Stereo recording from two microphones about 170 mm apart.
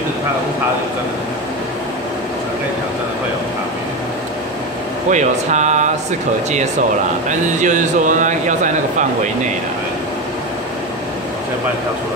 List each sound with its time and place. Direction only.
5.1 s speech: 45° right (ahead or behind)
7.2 s speech: 45° right (ahead or behind)